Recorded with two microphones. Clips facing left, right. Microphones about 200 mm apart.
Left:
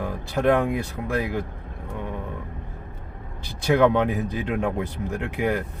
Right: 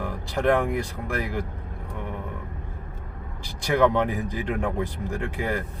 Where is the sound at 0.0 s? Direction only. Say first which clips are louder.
Left 2 dB; 20° left (ahead or behind).